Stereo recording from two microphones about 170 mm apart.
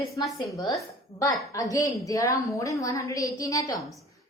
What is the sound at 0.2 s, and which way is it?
Speech, 25° left (ahead or behind).